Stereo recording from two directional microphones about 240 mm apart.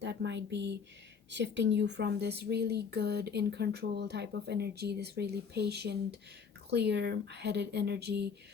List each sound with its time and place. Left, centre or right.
0.0 s speech: right